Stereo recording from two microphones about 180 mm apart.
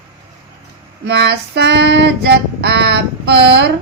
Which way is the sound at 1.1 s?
70° right (ahead or behind).